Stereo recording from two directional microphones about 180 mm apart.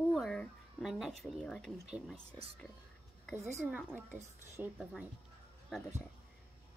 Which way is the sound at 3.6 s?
5° right (ahead or behind).